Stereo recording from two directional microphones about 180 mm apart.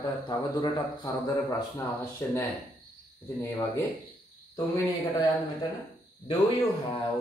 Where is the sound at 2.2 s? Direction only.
10° left (ahead or behind).